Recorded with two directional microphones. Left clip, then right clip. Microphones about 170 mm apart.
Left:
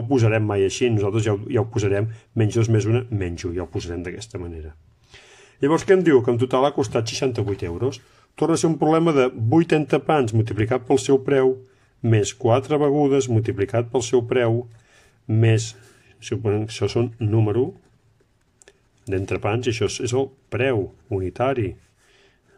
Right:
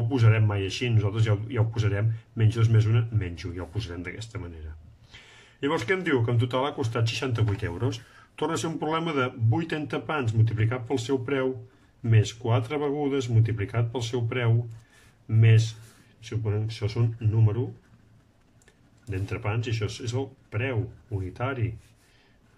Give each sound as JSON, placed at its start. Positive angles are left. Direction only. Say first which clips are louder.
{"t": 0.1, "sound": "a man's voice", "louder": "left 9 dB", "side_deg": 40}
{"t": 8.5, "sound": "a man's voice", "louder": "left 10 dB", "side_deg": 35}
{"t": 16.2, "sound": "speech", "louder": "left 10 dB", "side_deg": 50}
{"t": 18.7, "sound": "speech", "louder": "left 12 dB", "side_deg": 45}